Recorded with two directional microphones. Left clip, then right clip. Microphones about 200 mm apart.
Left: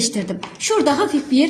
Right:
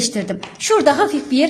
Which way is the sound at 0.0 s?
35° right (ahead or behind).